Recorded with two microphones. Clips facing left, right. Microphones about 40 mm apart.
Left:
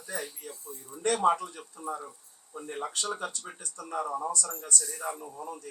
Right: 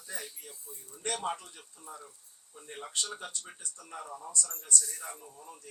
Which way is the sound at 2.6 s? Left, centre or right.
Left.